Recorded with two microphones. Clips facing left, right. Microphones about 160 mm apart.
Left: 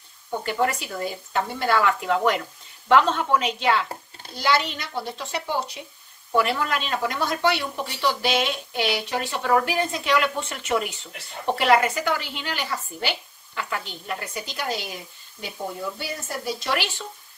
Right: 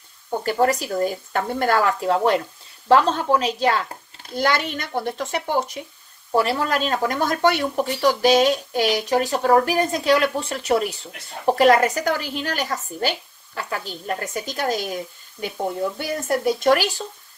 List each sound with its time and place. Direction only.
0.5 s speech: 40° right (ahead or behind)
4.4 s a woman's voice: 50° right (ahead or behind)
6.3 s a woman's voice: 35° right (ahead or behind)
16.0 s a woman's voice: 55° right (ahead or behind)